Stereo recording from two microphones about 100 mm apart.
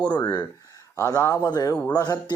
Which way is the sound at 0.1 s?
45° left (ahead or behind).